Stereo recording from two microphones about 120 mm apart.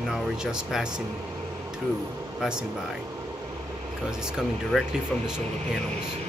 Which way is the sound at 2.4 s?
5° right (ahead or behind).